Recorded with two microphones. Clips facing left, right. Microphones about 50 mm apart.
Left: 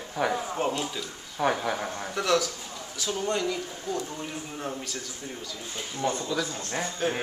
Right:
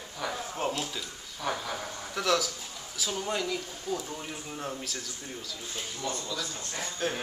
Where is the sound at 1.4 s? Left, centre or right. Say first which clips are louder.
Left 7 dB; left.